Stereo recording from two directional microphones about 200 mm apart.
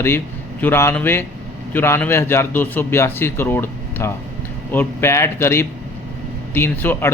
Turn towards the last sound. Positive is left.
turn(degrees=10)  # may be behind; listen again after turning